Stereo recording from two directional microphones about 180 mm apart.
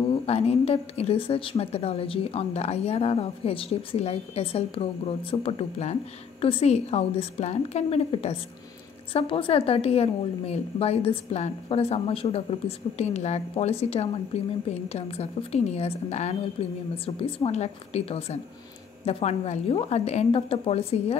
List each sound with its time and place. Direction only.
0.3 s a woman's voice: 35° left (ahead or behind)